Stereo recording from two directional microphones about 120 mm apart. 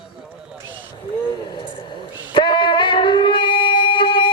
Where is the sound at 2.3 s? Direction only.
40° left (ahead or behind).